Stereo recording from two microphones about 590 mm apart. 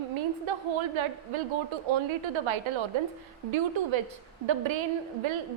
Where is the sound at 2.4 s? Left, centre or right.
Right.